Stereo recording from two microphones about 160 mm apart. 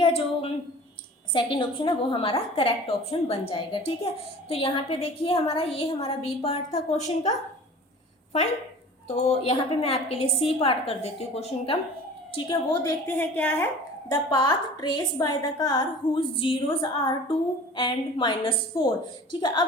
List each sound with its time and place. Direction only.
0.0 s a woman's voice: 35° left (ahead or behind)
9.0 s a woman's voice: 45° left (ahead or behind)
12.8 s a woman's voice: 10° left (ahead or behind)
14.1 s a woman's voice: 25° left (ahead or behind)